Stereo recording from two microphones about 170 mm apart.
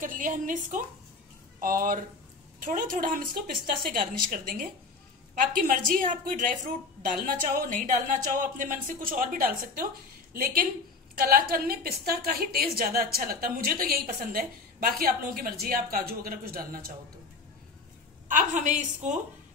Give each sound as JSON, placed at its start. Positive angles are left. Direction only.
{"t": 0.0, "sound": "a woman's voice", "side_deg": -50}
{"t": 18.3, "sound": "a woman's voice", "side_deg": -45}